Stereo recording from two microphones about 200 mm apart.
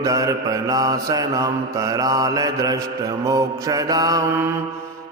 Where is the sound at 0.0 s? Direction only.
15° right (ahead or behind).